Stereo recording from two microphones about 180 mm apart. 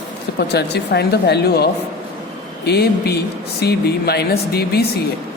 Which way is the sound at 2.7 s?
65° left (ahead or behind).